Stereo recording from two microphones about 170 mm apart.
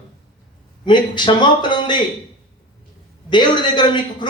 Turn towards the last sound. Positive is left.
turn(degrees=25)  # may be behind; listen again after turning